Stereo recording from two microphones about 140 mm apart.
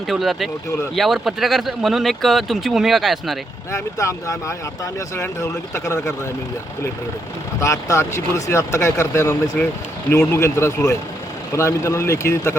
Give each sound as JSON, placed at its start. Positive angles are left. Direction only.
{"t": 0.1, "sound": "speech", "side_deg": 0}
{"t": 3.7, "sound": "speech", "side_deg": 20}
{"t": 7.6, "sound": "speech", "side_deg": 20}